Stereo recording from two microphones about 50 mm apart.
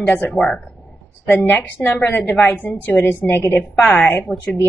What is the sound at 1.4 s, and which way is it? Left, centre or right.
A woman's voice, left.